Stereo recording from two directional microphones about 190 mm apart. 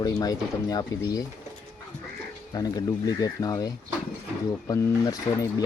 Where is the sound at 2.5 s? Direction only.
20° left (ahead or behind).